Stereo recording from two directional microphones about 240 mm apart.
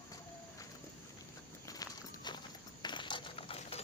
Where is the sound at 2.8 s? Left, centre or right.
Centre.